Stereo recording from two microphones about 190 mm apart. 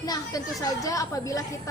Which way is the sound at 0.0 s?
20° left (ahead or behind).